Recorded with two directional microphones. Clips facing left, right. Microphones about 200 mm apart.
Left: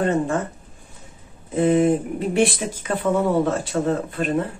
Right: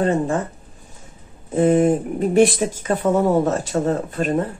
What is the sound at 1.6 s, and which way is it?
Speech, 45° right (ahead or behind).